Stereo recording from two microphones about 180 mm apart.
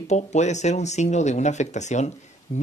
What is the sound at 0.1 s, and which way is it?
Speech, 40° left (ahead or behind).